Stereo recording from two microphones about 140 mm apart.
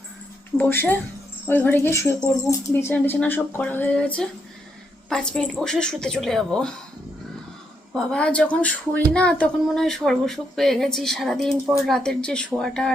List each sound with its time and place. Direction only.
0.5 s speech: 15° left (ahead or behind)
7.9 s speech: 5° left (ahead or behind)